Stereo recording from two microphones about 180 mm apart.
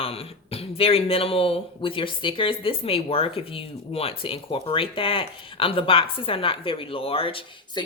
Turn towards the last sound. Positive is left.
turn(degrees=30)  # may be behind; listen again after turning